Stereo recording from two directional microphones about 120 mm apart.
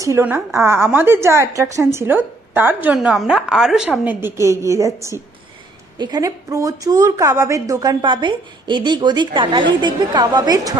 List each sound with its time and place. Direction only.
0.0 s a woman's voice: 20° right (ahead or behind)